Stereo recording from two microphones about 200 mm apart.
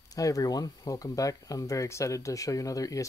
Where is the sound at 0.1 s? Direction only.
15° left (ahead or behind).